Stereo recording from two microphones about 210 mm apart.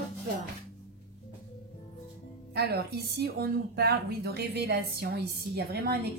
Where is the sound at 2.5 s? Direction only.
50° right (ahead or behind).